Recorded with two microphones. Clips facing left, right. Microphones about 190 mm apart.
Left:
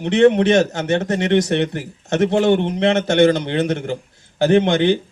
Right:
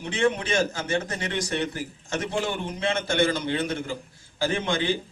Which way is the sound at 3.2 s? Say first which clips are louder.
Left 10 dB; 20° left (ahead or behind).